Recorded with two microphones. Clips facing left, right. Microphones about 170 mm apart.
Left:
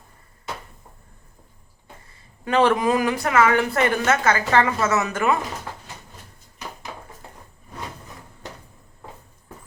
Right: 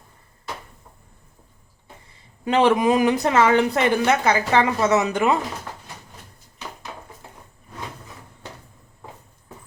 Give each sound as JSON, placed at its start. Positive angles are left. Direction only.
{"t": 2.0, "sound": "a woman's voice", "side_deg": -20}